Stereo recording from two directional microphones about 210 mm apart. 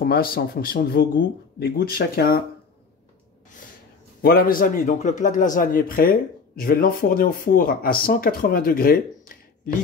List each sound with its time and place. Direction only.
0.0 s a man's voice: 45° left (ahead or behind)
4.2 s a man's voice: 45° left (ahead or behind)